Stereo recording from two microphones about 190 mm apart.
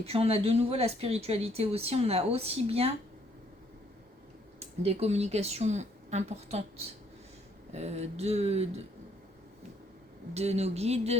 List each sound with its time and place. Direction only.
0.0 s speech: 30° right (ahead or behind)
4.6 s speech: 30° right (ahead or behind)
10.3 s speech: 35° right (ahead or behind)